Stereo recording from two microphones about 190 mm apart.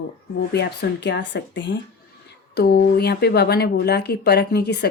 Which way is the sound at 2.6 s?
60° left (ahead or behind).